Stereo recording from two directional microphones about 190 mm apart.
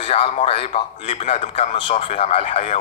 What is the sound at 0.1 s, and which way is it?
A man's voice, 30° left (ahead or behind).